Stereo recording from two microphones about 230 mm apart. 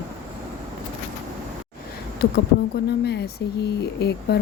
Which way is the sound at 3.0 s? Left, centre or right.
Left.